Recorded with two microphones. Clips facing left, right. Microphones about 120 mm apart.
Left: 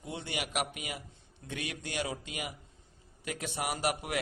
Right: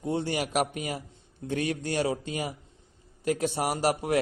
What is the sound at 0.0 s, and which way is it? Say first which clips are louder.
A man's voice: right 10 dB; 40° right (ahead or behind).